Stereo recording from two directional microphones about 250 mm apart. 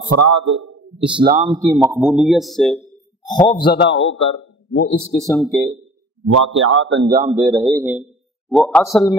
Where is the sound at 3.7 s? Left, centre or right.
Left.